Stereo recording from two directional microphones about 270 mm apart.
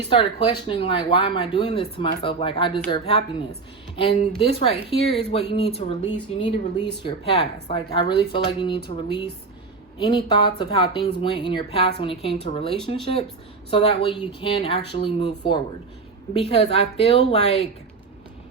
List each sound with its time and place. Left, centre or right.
0.1 s speech: left
4.4 s speech: left
12.7 s speech: centre
13.7 s speech: centre